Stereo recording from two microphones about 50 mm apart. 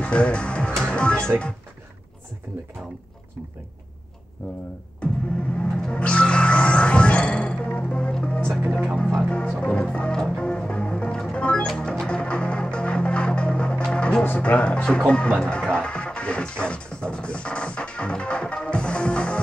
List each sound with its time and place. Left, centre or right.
0.0 s music: left
5.0 s music: left
14.4 s speech: left